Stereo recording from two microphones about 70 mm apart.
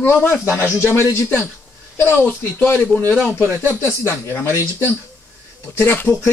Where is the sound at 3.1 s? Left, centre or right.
Centre.